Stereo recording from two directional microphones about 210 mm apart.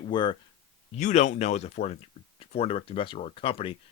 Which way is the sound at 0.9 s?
35° left (ahead or behind).